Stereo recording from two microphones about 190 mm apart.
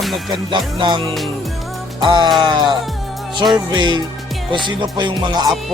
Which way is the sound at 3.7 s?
25° right (ahead or behind).